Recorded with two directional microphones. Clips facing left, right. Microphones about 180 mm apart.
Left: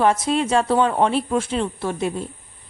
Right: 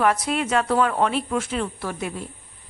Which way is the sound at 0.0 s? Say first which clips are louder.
Left 3 dB; 25° left (ahead or behind).